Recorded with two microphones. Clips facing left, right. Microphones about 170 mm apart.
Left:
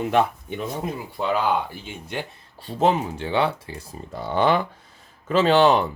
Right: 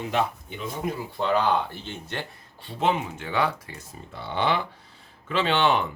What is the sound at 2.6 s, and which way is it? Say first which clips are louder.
Speech: left 4 dB; 40° left (ahead or behind).